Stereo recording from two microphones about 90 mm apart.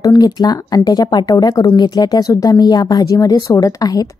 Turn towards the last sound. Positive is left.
turn(degrees=45)  # may be behind; listen again after turning